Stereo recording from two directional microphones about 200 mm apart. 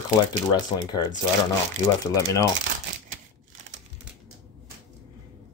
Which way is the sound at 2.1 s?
15° left (ahead or behind).